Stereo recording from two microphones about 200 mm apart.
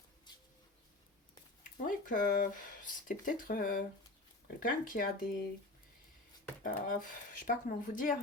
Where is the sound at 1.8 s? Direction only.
40° left (ahead or behind).